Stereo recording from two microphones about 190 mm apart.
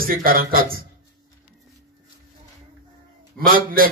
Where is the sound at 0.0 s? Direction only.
50° right (ahead or behind).